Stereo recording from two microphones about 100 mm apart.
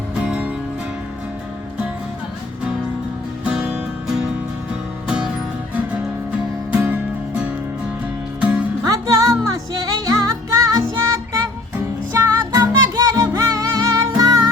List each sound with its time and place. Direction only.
0.3 s music: 15° right (ahead or behind)
3.4 s music: 10° right (ahead or behind)
6.7 s music: 15° right (ahead or behind)
8.8 s music: 35° right (ahead or behind)
12.1 s music: 30° right (ahead or behind)